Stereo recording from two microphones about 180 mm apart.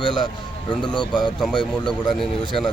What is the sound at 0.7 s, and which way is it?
Speech, 25° left (ahead or behind).